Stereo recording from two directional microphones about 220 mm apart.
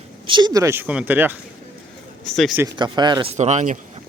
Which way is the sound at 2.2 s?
Centre (ahead or behind).